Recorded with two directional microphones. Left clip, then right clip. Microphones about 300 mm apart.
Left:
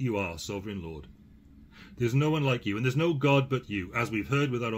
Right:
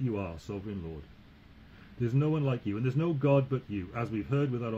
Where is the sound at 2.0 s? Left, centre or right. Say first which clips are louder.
Left 3 dB; centre.